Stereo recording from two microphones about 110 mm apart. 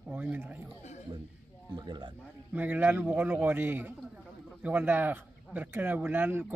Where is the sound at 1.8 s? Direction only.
45° right (ahead or behind).